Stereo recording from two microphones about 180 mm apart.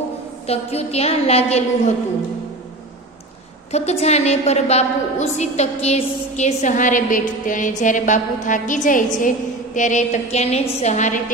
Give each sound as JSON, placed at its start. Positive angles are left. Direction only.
{"t": 0.5, "sound": "a woman's voice", "side_deg": 35}
{"t": 3.7, "sound": "a woman's voice", "side_deg": 35}